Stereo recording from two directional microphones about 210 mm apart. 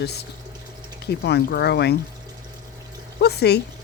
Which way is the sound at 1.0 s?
50° left (ahead or behind).